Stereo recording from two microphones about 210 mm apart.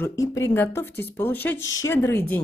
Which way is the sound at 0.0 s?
15° left (ahead or behind).